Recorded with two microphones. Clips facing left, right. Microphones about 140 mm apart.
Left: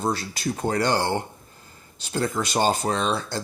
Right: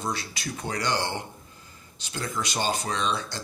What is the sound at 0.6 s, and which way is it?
Speech, 50° left (ahead or behind).